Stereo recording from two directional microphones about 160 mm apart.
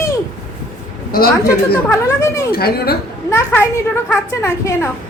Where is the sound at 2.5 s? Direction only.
75° left (ahead or behind).